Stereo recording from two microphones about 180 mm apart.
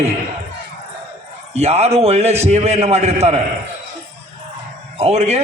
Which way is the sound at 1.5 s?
35° right (ahead or behind).